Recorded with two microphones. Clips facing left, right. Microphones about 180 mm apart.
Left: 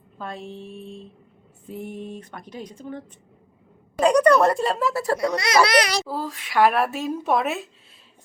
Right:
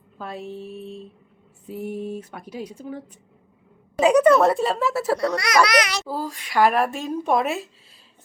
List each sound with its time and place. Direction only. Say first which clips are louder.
0.2 s speech: right 2 dB; 5° right (ahead or behind)
5.2 s speech: left 1 dB; 20° left (ahead or behind)
6.1 s speech: right 1 dB; centre (ahead or behind)